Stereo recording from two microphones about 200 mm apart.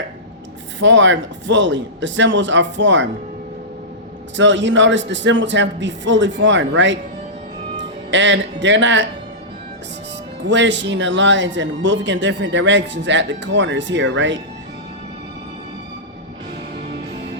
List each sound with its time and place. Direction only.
0.8 s speech: 65° right (ahead or behind)
4.4 s speech: 65° right (ahead or behind)
10.4 s speech: 65° right (ahead or behind)